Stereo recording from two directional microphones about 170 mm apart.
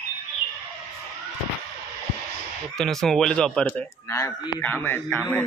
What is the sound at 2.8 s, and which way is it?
Speech, centre (ahead or behind).